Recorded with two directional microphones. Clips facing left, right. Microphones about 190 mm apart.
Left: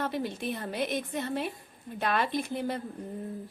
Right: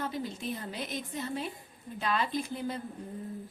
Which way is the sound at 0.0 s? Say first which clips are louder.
Left 3 dB; 65° left (ahead or behind).